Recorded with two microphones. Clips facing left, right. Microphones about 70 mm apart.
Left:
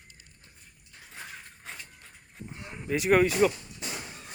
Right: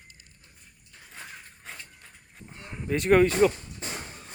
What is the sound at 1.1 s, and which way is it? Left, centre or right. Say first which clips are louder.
Mechanisms: even; centre.